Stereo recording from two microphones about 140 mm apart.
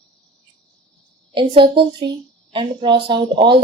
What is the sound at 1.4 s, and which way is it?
Speech, 40° right (ahead or behind).